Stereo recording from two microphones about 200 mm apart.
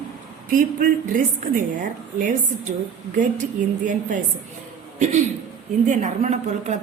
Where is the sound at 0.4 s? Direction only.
45° right (ahead or behind).